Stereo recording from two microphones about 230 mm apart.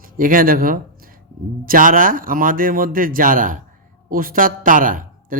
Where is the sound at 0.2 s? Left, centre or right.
Right.